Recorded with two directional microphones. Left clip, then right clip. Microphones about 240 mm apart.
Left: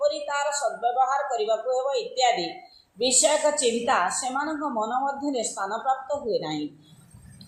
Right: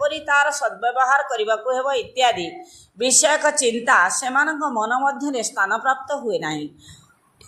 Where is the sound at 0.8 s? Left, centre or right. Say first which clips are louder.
Right 6 dB; right.